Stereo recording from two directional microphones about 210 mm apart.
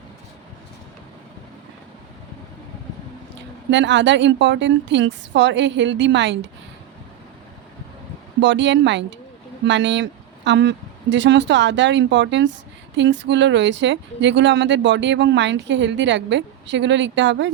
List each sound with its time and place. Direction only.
3.7 s speech: 60° right (ahead or behind)
8.4 s speech: 60° right (ahead or behind)